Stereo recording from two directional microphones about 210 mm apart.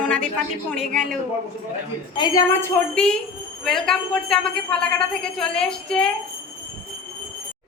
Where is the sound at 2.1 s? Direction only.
20° left (ahead or behind).